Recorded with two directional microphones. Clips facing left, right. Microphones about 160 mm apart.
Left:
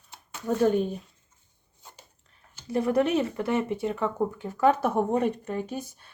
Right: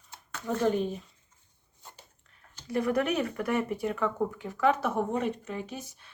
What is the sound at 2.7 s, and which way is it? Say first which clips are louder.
Speech: left 4 dB; 30° left (ahead or behind).